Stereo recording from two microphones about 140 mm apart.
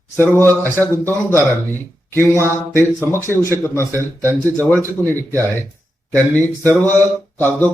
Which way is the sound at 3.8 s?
20° right (ahead or behind).